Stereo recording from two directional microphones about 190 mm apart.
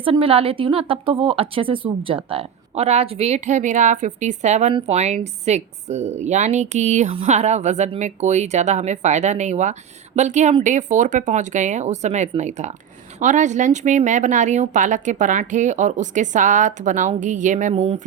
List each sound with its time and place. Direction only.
0.0 s a woman's voice: 30° right (ahead or behind)